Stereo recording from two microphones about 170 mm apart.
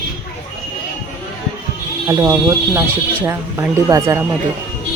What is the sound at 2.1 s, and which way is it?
Speech, 15° right (ahead or behind).